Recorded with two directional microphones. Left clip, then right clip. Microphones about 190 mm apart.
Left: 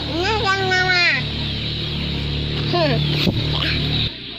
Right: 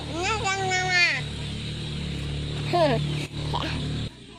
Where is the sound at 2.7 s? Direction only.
40° right (ahead or behind).